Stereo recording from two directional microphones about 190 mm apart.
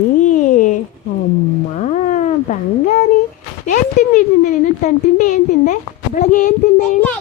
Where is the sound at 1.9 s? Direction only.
40° left (ahead or behind).